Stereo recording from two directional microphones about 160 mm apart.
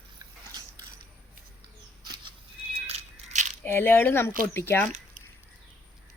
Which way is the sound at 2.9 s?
45° right (ahead or behind).